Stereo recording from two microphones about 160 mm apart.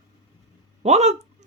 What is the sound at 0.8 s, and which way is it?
Speech, 40° right (ahead or behind).